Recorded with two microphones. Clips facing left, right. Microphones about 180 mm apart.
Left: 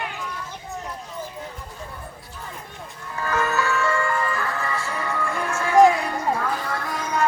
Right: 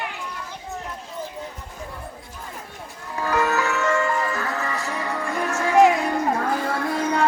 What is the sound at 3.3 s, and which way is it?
Music, 15° right (ahead or behind).